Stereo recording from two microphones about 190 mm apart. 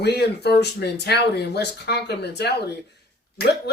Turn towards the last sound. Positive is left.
turn(degrees=60)  # may be behind; listen again after turning